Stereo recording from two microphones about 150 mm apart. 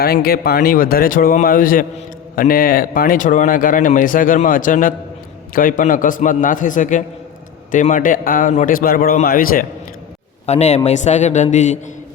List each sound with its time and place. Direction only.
0.0 s a man's voice: 90° left; by 9.6 s 70° left (ahead or behind)
10.4 s speech: 50° left (ahead or behind)